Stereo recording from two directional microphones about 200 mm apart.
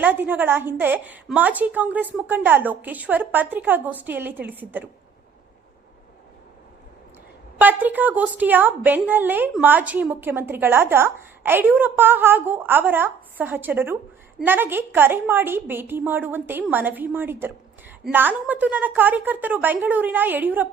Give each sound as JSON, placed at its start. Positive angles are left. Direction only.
{"t": 0.0, "sound": "a woman's voice", "side_deg": -10}
{"t": 7.6, "sound": "a woman's voice", "side_deg": -10}